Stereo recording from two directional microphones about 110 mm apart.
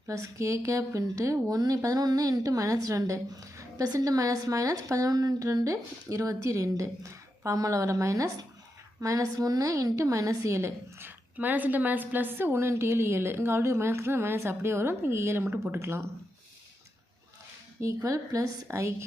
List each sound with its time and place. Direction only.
0.1 s a woman's voice: 30° right (ahead or behind)
17.7 s a woman's voice: 30° right (ahead or behind)